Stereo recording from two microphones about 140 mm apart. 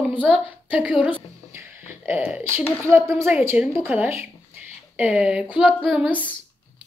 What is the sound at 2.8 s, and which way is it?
A woman's voice, 20° right (ahead or behind).